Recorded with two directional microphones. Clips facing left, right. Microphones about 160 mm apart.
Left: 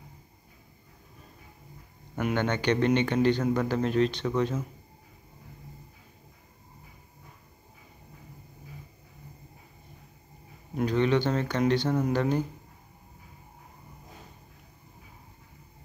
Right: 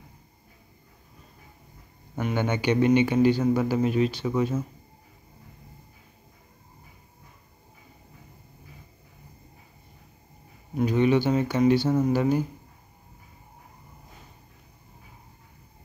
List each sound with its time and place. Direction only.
2.3 s speech: 10° right (ahead or behind)
10.9 s speech: 10° right (ahead or behind)